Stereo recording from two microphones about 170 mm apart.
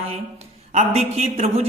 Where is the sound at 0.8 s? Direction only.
40° right (ahead or behind).